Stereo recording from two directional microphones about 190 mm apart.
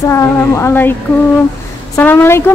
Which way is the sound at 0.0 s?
15° left (ahead or behind).